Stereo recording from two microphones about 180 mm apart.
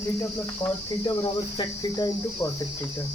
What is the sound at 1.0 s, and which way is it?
Cricket, 25° left (ahead or behind).